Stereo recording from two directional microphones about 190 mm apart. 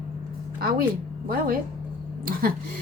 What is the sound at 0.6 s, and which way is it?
A woman's voice, 50° right (ahead or behind).